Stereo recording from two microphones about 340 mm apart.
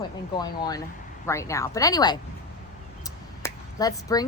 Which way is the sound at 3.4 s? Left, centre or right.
Centre.